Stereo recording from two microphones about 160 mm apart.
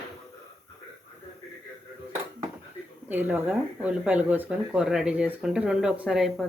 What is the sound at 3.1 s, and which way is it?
Speech, 10° right (ahead or behind).